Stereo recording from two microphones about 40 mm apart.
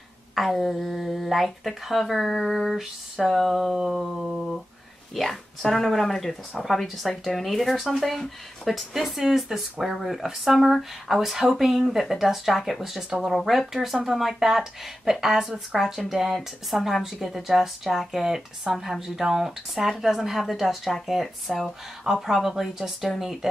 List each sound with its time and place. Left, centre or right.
0.3 s speech: centre
3.7 s a woman's voice: centre
5.1 s a woman's voice: centre
22.0 s a woman's voice: centre